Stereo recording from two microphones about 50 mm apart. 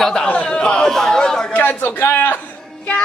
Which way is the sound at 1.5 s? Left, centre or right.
Left.